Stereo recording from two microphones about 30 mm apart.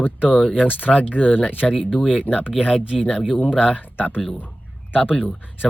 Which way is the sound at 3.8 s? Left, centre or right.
Left.